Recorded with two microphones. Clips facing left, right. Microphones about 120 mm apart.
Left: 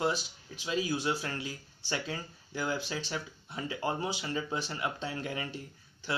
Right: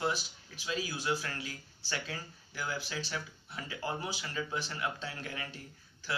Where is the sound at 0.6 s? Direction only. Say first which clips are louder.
Left 4 dB; 20° left (ahead or behind).